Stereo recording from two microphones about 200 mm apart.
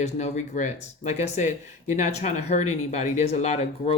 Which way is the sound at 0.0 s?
35° left (ahead or behind).